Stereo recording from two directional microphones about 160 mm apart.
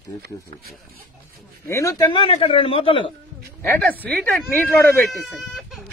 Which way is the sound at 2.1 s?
35° left (ahead or behind).